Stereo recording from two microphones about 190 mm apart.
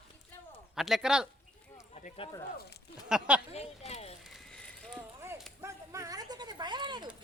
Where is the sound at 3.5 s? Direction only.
35° left (ahead or behind).